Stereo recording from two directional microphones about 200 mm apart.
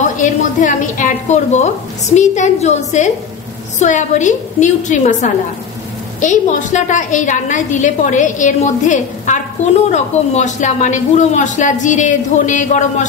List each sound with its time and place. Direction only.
0.0 s a woman's voice: 40° left (ahead or behind)